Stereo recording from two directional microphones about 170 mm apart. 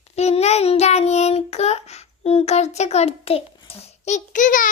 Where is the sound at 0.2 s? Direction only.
40° left (ahead or behind).